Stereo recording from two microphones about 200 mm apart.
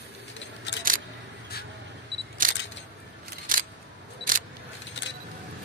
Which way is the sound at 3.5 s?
45° right (ahead or behind).